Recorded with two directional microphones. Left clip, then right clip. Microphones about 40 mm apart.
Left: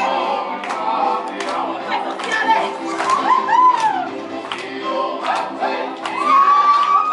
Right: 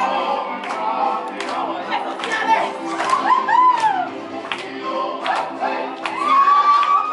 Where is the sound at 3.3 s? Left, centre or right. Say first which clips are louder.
Left 1 dB; right.